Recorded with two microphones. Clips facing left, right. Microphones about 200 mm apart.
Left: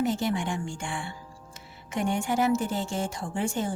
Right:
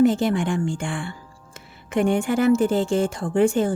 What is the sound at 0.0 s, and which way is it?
A woman's voice, 55° right (ahead or behind).